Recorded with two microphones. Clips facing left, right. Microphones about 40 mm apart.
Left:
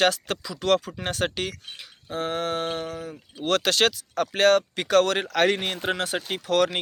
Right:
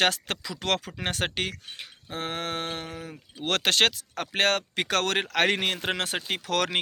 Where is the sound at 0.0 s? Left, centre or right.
Right.